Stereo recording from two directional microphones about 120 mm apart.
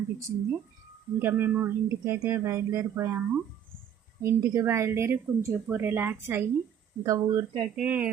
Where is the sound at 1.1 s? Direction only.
15° right (ahead or behind).